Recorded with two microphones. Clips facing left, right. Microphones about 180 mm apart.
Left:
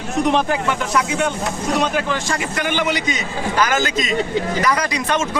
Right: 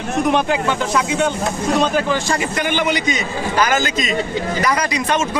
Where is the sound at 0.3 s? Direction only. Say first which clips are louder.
Right 1 dB; 15° right (ahead or behind).